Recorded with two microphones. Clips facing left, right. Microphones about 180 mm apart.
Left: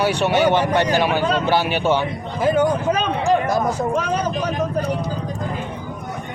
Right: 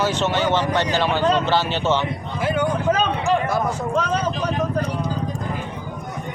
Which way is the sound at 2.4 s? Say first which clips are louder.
Left 5 dB; 40° left (ahead or behind).